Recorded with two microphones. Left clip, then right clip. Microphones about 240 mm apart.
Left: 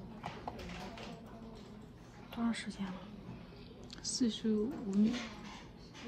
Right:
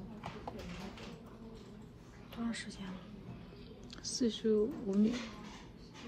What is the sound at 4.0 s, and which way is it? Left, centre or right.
Speech, centre.